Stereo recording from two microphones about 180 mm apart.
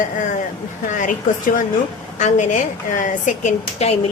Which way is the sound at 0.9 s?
45° left (ahead or behind).